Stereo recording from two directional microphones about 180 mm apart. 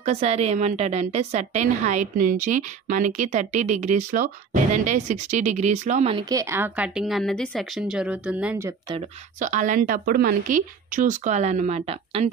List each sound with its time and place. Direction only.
0.0 s a woman's voice: 35° right (ahead or behind)
6.2 s a woman's voice: 15° right (ahead or behind)
9.4 s a woman's voice: 45° right (ahead or behind)